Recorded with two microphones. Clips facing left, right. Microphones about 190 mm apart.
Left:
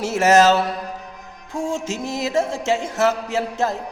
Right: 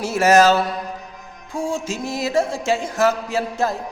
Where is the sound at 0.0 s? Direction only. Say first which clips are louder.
Even; 20° left (ahead or behind).